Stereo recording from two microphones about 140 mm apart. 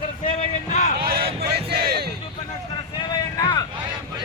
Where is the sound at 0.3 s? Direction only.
60° left (ahead or behind).